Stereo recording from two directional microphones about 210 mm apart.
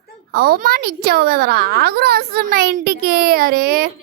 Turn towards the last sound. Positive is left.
turn(degrees=-45)  # may be behind; listen again after turning